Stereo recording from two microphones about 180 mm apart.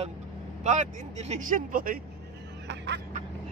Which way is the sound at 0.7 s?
40° right (ahead or behind).